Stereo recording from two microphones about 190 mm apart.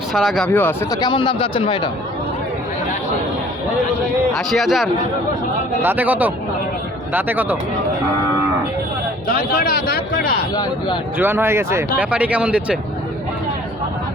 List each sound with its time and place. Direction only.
0.1 s speech: centre (ahead or behind)
1.0 s a man's voice: 25° left (ahead or behind)
4.4 s speech: centre (ahead or behind)
9.2 s speech: 50° left (ahead or behind)
10.5 s a man's voice: 20° left (ahead or behind)
11.2 s speech: 10° right (ahead or behind)